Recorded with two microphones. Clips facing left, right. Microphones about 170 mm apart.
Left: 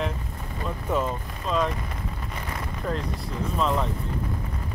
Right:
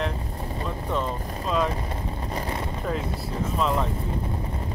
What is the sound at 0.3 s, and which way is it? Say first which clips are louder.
Boat: right 2 dB; 30° right (ahead or behind).